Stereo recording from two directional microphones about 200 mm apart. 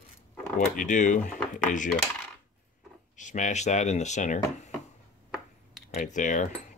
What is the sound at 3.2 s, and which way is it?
Speech, 40° left (ahead or behind).